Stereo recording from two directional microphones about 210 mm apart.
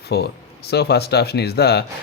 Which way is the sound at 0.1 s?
50° left (ahead or behind).